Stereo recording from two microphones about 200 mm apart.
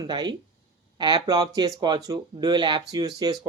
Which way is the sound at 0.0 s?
20° right (ahead or behind).